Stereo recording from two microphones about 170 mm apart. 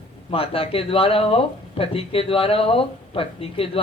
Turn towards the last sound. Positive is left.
turn(degrees=35)  # may be behind; listen again after turning